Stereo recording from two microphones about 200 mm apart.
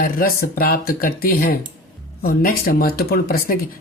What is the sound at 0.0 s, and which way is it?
Speech, 45° left (ahead or behind).